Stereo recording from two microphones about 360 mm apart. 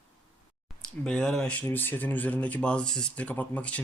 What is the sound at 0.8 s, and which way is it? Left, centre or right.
Speech, centre.